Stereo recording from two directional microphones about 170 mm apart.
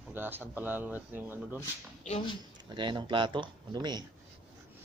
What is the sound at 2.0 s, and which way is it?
Speech, 40° left (ahead or behind).